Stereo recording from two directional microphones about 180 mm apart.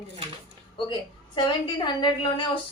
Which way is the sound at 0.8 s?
25° left (ahead or behind).